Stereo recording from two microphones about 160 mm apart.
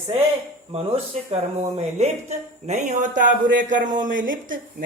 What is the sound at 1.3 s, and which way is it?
Speech, 40° right (ahead or behind).